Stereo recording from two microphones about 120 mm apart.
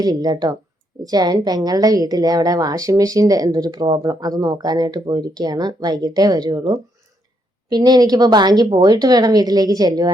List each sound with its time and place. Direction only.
0.0 s a woman's voice: 30° right (ahead or behind)